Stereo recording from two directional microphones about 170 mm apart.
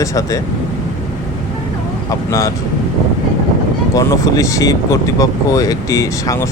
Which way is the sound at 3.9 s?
20° left (ahead or behind).